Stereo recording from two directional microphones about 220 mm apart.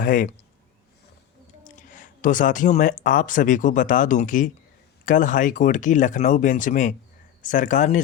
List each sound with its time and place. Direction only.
0.0 s speech: 35° left (ahead or behind)
1.6 s speech: 35° left (ahead or behind)